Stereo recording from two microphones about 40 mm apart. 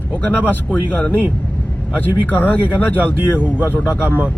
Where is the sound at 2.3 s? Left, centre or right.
Left.